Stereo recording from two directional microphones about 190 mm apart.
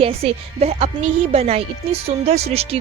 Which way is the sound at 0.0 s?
30° right (ahead or behind).